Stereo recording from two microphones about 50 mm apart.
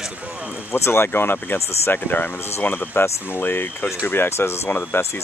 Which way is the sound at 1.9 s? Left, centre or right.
Left.